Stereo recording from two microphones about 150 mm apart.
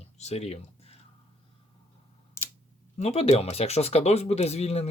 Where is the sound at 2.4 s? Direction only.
20° left (ahead or behind).